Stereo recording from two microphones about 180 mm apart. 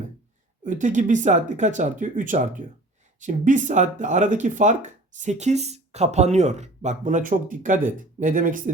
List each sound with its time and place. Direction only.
0.6 s speech: 45° right (ahead or behind)